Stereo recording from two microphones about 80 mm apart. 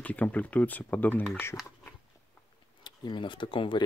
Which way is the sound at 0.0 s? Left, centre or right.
Centre.